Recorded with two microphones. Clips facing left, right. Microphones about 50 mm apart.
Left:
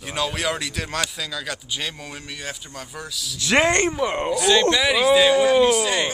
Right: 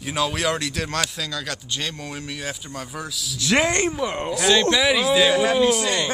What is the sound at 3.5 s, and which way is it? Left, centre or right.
Speech, centre.